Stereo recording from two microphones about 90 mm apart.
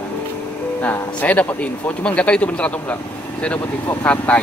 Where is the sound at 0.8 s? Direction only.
15° left (ahead or behind).